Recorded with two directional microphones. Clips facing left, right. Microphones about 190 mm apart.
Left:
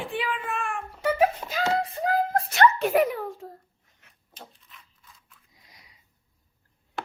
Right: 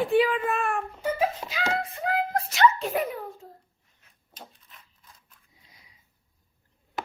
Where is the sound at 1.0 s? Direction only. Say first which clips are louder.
Left 5 dB; 70° left (ahead or behind).